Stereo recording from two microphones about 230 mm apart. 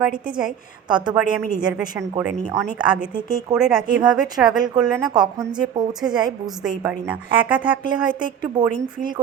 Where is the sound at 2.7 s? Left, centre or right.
Centre.